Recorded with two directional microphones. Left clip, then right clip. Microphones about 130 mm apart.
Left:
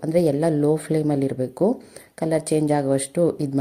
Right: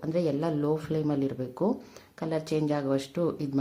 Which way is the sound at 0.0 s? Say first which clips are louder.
Left 9 dB; 35° left (ahead or behind).